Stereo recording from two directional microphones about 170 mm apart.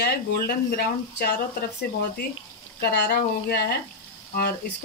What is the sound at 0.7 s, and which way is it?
Speech, 65° left (ahead or behind).